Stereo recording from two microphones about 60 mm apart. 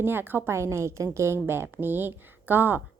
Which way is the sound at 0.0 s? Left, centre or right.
Right.